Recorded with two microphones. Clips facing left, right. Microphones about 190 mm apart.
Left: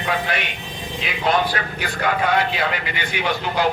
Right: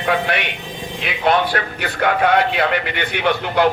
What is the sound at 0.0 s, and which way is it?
A man's voice, 60° right (ahead or behind).